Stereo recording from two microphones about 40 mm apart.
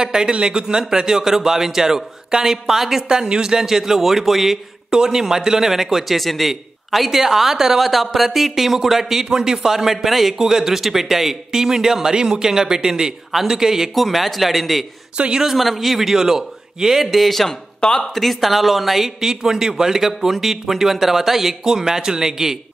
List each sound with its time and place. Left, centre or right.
0.0 s a man's voice: centre
15.1 s speech: right
15.4 s speech: centre
17.7 s speech: left
18.0 s a man's voice: centre